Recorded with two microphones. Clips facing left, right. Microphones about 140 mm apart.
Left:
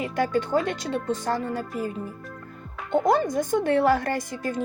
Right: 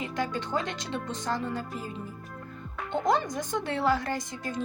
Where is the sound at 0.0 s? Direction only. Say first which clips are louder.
Left 7 dB; 50° left (ahead or behind).